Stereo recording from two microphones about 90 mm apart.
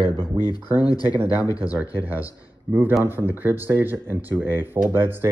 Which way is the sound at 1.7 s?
20° right (ahead or behind).